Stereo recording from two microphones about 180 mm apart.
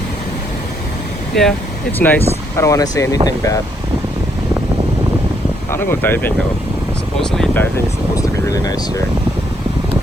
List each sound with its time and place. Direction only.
1.3 s speech: centre (ahead or behind); by 3.6 s 20° left (ahead or behind)
5.7 s speech: 10° left (ahead or behind)
8.1 s speech: 20° left (ahead or behind)